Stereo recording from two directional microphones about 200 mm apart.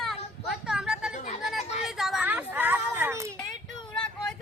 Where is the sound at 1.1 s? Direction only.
35° left (ahead or behind).